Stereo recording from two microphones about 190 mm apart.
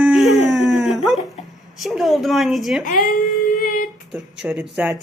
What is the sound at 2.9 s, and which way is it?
Speech, 45° left (ahead or behind).